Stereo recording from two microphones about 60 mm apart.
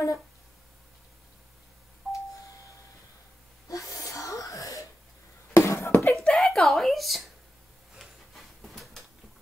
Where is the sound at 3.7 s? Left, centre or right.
Left.